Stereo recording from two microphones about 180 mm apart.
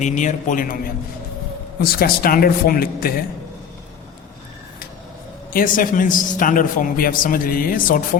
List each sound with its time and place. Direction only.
0.0 s a man's voice: 45° left (ahead or behind)
1.8 s a man's voice: 55° left (ahead or behind)
5.5 s a man's voice: 50° left (ahead or behind)